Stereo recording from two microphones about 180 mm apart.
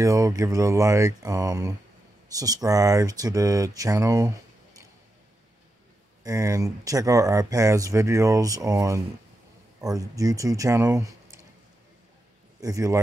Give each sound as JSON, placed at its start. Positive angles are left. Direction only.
{"t": 0.0, "sound": "speech", "side_deg": -20}
{"t": 6.2, "sound": "speech", "side_deg": -15}
{"t": 12.5, "sound": "speech", "side_deg": -20}